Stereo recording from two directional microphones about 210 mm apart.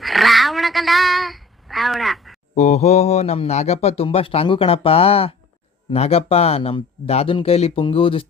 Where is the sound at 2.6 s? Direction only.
30° left (ahead or behind).